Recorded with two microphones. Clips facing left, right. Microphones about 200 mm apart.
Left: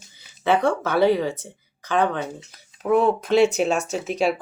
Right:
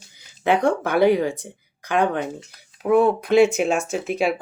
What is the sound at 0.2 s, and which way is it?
Speech, 15° right (ahead or behind).